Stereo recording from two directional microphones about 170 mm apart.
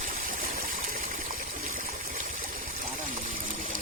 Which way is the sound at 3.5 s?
55° right (ahead or behind).